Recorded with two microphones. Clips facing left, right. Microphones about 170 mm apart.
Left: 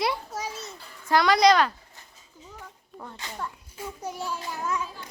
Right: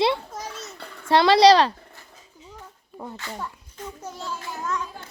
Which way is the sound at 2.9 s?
5° right (ahead or behind).